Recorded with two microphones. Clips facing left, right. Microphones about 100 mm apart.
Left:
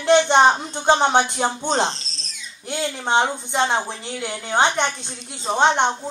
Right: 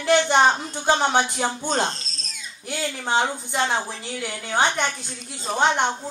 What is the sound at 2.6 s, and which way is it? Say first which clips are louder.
A woman's voice: left 3 dB; 20° left (ahead or behind).